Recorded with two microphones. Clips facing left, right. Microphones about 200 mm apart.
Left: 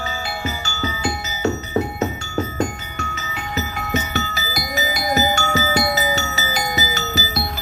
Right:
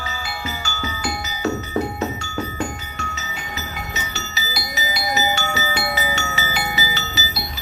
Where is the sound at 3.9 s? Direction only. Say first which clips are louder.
Left 8 dB; 50° left (ahead or behind).